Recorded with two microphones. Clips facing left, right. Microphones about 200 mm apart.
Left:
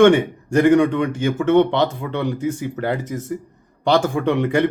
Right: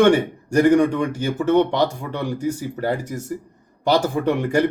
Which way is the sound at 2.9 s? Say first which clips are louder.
Left 2 dB; 10° right (ahead or behind).